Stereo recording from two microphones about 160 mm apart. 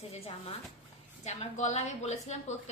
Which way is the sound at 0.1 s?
40° left (ahead or behind).